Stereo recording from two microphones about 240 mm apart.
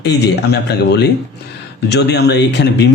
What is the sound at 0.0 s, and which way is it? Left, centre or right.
Speech, left.